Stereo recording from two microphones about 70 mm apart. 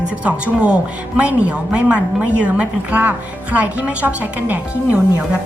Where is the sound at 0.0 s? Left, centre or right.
Centre.